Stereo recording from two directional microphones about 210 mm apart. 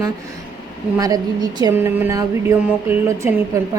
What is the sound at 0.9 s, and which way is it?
Speech, 15° right (ahead or behind).